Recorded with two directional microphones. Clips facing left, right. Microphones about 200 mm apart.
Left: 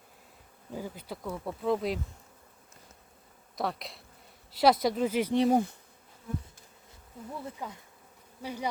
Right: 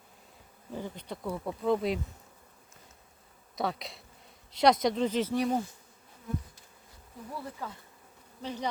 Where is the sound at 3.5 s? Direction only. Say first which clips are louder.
Right 1 dB; centre (ahead or behind).